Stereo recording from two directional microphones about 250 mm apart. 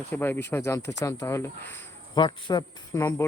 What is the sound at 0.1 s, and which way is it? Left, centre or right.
Speech, centre.